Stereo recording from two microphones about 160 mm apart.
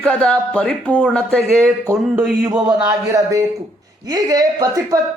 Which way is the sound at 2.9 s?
20° right (ahead or behind).